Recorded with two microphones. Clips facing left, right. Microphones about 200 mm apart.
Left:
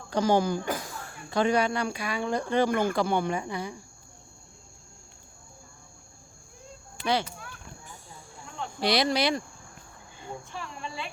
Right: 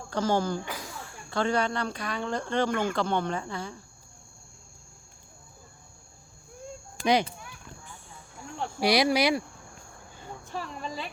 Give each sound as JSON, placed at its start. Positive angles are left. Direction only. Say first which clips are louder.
{"t": 0.1, "sound": "speech", "louder": "left 3 dB", "side_deg": 15}
{"t": 7.0, "sound": "speech", "louder": "right 4 dB", "side_deg": -15}
{"t": 8.8, "sound": "speech", "louder": "right 2 dB", "side_deg": -10}
{"t": 10.5, "sound": "speech", "louder": "right 3 dB", "side_deg": -40}